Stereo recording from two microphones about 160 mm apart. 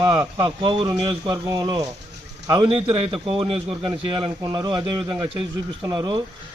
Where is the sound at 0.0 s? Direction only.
25° right (ahead or behind).